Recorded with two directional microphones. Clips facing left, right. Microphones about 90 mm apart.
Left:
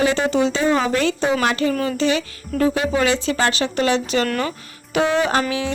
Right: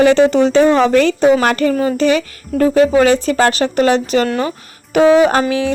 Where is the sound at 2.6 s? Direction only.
45° right (ahead or behind).